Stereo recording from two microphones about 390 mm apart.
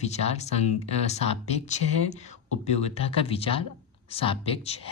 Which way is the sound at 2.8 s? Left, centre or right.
Centre.